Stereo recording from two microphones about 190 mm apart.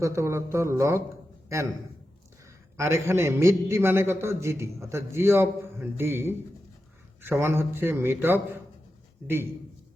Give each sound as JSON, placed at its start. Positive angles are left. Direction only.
{"t": 0.0, "sound": "a man's voice", "side_deg": -15}
{"t": 2.7, "sound": "a man's voice", "side_deg": -15}